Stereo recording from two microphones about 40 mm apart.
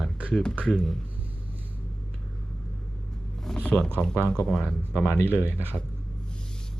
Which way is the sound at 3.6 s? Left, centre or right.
Left.